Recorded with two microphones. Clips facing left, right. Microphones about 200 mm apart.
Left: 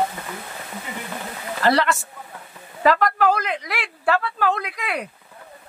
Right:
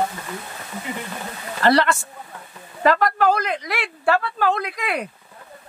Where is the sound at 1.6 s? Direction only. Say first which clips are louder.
Right 2 dB; 5° left (ahead or behind).